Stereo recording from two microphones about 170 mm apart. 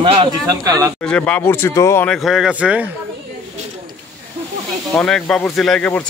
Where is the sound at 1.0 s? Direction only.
5° left (ahead or behind).